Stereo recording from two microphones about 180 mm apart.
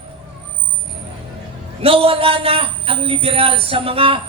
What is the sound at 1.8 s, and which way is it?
A man's voice, 30° right (ahead or behind).